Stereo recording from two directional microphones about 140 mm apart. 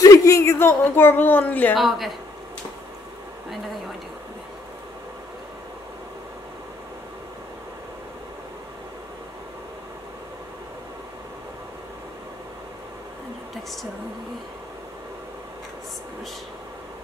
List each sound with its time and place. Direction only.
0.0 s speech: 20° left (ahead or behind)
1.8 s speech: centre (ahead or behind)